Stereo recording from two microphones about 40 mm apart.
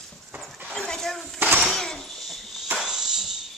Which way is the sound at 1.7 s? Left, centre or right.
Centre.